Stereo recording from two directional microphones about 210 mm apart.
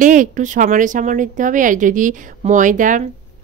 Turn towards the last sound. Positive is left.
turn(degrees=-40)  # may be behind; listen again after turning